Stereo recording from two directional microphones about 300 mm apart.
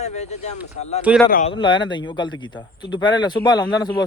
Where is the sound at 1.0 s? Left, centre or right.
Centre.